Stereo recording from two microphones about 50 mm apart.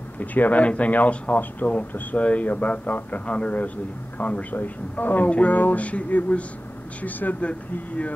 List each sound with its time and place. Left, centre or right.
0.2 s speech: left
5.3 s music: left
7.0 s speech: left